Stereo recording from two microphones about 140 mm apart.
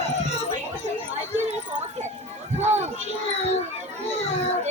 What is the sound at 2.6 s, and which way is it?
Run, 55° right (ahead or behind).